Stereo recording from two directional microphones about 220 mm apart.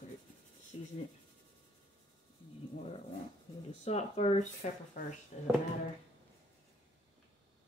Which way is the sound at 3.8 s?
30° left (ahead or behind).